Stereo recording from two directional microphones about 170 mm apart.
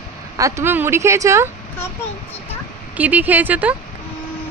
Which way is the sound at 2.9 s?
10° right (ahead or behind).